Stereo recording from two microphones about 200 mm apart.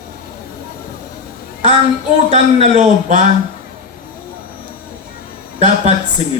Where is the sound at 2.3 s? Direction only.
30° right (ahead or behind).